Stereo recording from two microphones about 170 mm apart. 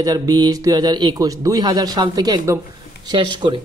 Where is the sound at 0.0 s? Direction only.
20° right (ahead or behind).